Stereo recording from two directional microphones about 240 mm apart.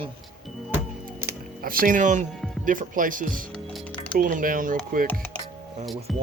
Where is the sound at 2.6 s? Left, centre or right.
Right.